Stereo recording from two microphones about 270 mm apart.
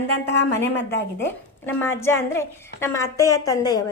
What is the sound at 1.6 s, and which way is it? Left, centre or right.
A woman's voice, centre.